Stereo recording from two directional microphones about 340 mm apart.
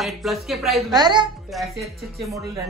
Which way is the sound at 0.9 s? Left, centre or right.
Centre.